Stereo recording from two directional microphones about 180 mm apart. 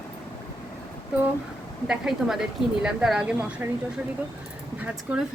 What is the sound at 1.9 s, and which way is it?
A woman's voice, 5° right (ahead or behind).